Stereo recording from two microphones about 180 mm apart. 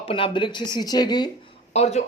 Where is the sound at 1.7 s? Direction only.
35° left (ahead or behind).